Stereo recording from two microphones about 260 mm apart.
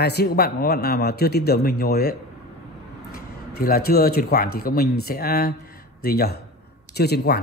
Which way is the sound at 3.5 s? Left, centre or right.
Left.